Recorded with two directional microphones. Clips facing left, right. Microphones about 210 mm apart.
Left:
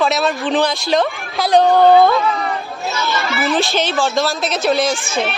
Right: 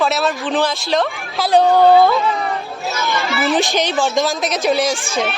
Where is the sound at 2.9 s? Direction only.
15° right (ahead or behind).